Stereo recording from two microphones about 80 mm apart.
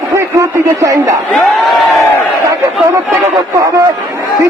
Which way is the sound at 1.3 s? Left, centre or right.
Centre.